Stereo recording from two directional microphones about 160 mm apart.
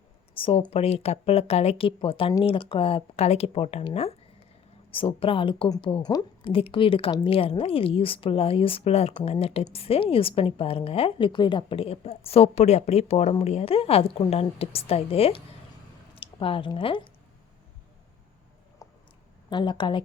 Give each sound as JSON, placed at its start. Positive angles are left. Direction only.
{"t": 0.3, "sound": "a woman's voice", "side_deg": 35}
{"t": 4.9, "sound": "a woman's voice", "side_deg": 35}
{"t": 18.8, "sound": "a sound", "side_deg": 20}
{"t": 19.5, "sound": "a woman's voice", "side_deg": 30}